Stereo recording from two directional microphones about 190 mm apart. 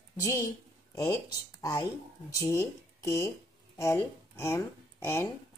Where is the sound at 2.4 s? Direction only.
15° left (ahead or behind).